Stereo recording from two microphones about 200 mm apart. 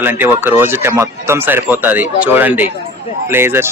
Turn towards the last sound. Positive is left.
turn(degrees=-10)  # may be behind; listen again after turning